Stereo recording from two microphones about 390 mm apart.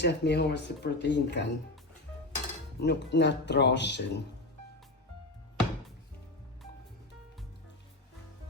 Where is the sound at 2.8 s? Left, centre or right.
Left.